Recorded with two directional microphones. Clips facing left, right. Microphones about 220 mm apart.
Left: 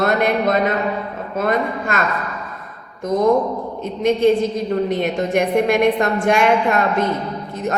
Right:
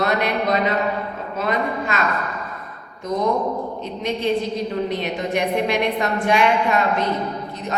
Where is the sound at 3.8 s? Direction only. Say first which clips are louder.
Left 8 dB; 50° left (ahead or behind).